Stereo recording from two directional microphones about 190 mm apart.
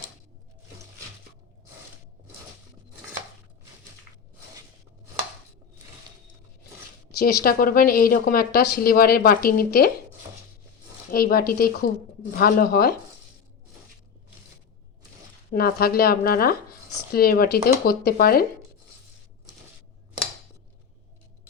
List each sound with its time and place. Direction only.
7.2 s speech: 55° left (ahead or behind)
11.1 s speech: 50° left (ahead or behind)
15.5 s speech: 50° left (ahead or behind)